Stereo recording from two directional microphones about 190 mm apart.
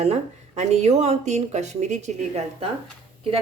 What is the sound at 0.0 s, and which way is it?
Speech, 35° right (ahead or behind).